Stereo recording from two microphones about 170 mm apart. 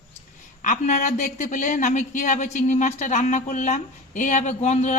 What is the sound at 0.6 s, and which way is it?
A woman's voice, 45° left (ahead or behind).